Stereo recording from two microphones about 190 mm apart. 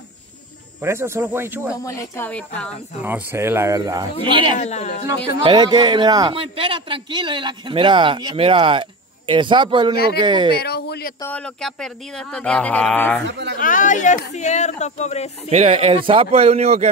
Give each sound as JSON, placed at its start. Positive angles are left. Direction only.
{"t": 0.7, "sound": "speech", "side_deg": -15}
{"t": 1.8, "sound": "speech", "side_deg": 15}
{"t": 3.0, "sound": "speech", "side_deg": -10}
{"t": 4.6, "sound": "speech", "side_deg": 35}
{"t": 5.4, "sound": "a man's voice", "side_deg": -25}
{"t": 10.5, "sound": "speech", "side_deg": 55}
{"t": 11.1, "sound": "speech", "side_deg": 10}
{"t": 13.6, "sound": "speech", "side_deg": 45}
{"t": 15.5, "sound": "a man's voice", "side_deg": -35}